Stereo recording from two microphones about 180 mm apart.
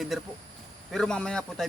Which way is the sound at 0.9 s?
5° left (ahead or behind).